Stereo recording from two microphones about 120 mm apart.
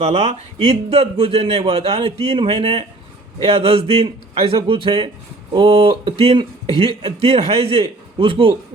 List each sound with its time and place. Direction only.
0.0 s a man's voice: 60° right (ahead or behind)